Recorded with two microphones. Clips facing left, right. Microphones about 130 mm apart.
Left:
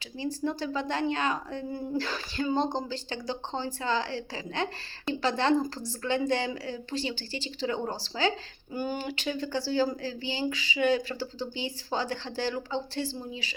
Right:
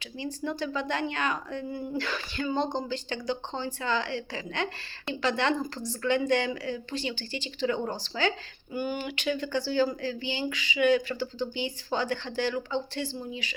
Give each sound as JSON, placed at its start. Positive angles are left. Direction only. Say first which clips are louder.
{"t": 0.2, "sound": "speech", "louder": "left 1 dB", "side_deg": 35}